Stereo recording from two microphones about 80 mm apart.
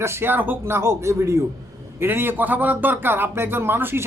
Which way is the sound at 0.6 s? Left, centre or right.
Right.